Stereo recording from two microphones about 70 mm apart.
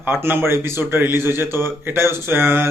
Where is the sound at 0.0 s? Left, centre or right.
Right.